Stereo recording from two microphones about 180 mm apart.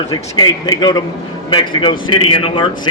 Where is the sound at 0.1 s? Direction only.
20° left (ahead or behind).